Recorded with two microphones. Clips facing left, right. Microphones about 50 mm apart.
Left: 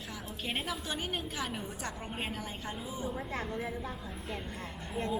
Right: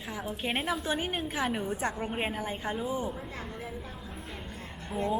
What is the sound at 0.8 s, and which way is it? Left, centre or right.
A woman's voice, centre.